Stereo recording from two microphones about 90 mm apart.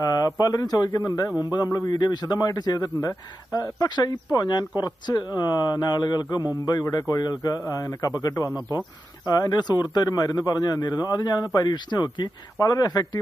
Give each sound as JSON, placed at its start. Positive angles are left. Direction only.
{"t": 0.0, "sound": "a man's voice", "side_deg": 45}
{"t": 9.2, "sound": "a man's voice", "side_deg": 45}